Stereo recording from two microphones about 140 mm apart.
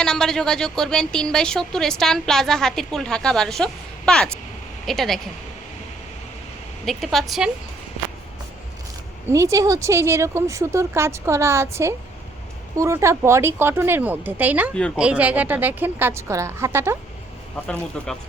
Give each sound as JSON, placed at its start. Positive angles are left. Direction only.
{"t": 0.0, "sound": "speech", "side_deg": 5}
{"t": 6.8, "sound": "speech", "side_deg": 0}
{"t": 9.3, "sound": "speech", "side_deg": -25}
{"t": 14.7, "sound": "speech", "side_deg": 5}
{"t": 14.9, "sound": "speech", "side_deg": -10}
{"t": 17.7, "sound": "speech", "side_deg": 5}